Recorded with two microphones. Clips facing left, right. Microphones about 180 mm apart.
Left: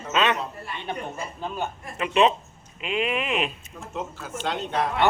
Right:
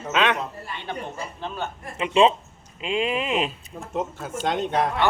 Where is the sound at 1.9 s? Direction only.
25° right (ahead or behind).